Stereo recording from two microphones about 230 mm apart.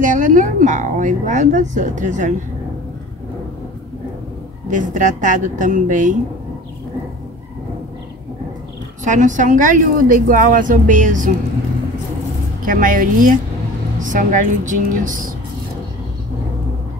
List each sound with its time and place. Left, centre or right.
0.0 s a woman's voice: right
4.6 s a woman's voice: right
9.0 s a woman's voice: right
12.6 s a woman's voice: right